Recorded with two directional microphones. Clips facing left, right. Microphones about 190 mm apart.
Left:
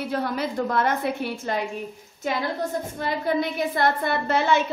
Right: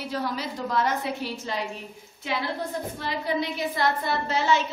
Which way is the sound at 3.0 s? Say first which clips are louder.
Left 4 dB; 50° left (ahead or behind).